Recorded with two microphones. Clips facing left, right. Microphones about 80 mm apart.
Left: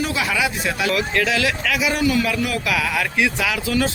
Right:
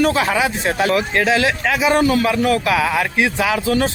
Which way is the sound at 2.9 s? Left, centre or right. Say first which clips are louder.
Right 3 dB; right.